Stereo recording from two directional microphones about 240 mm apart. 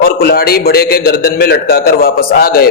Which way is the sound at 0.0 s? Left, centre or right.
Left.